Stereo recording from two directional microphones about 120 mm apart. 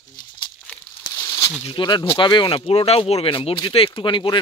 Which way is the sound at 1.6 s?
40° left (ahead or behind).